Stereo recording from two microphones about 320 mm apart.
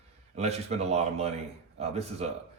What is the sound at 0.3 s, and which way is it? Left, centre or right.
Speech, centre.